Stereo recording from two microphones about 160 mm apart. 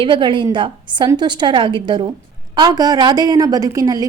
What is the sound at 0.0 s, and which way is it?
A woman's voice, 30° right (ahead or behind).